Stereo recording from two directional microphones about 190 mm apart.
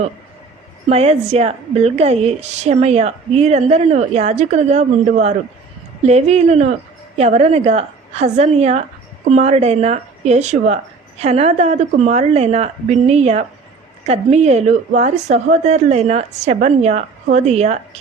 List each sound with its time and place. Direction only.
0.9 s a woman's voice: 35° right (ahead or behind)